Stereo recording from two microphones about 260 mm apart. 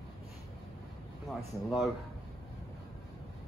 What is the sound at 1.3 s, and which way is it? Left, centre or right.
Speech, centre.